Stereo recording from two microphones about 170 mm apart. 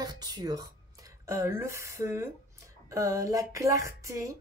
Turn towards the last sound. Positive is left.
turn(degrees=-20)  # may be behind; listen again after turning